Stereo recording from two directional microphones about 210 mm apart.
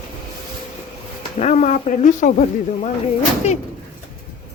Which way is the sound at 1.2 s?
30° left (ahead or behind).